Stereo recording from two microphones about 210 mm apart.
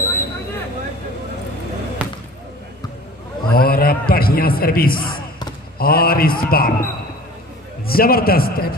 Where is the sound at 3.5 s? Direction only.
45° left (ahead or behind).